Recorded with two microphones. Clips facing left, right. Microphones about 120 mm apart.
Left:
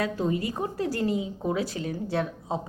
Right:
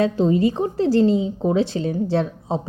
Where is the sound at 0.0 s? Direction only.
25° right (ahead or behind).